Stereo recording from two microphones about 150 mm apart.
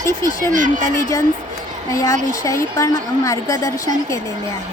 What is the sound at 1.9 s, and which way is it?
A woman's voice, 25° left (ahead or behind).